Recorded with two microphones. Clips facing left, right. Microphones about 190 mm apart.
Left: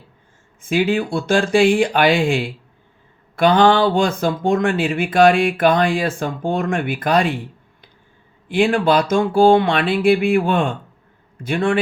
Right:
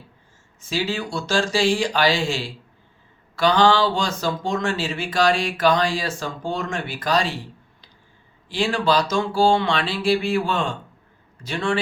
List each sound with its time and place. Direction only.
0.6 s a man's voice: 55° left (ahead or behind)